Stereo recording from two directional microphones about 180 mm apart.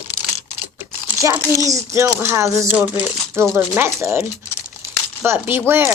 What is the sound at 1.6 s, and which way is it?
Speech, 15° right (ahead or behind).